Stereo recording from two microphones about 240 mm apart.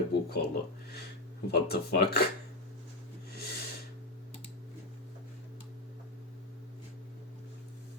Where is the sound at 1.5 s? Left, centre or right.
Left.